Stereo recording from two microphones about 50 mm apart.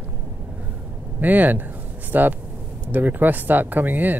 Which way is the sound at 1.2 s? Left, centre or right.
Right.